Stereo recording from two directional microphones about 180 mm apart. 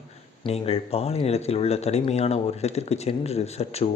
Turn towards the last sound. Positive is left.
turn(degrees=35)  # may be behind; listen again after turning